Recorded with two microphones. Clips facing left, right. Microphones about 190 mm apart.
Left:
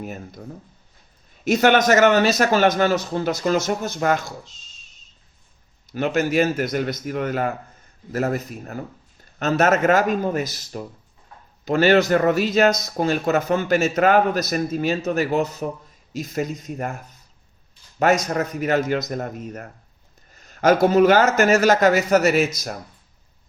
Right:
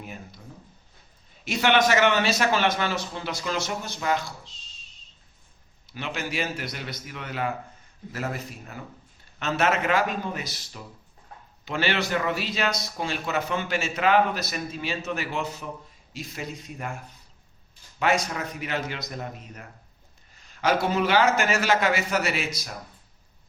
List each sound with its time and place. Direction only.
0.0 s speech: 45° left (ahead or behind)
1.5 s speech: 45° left (ahead or behind)
5.9 s speech: 45° left (ahead or behind)
18.0 s speech: 45° left (ahead or behind)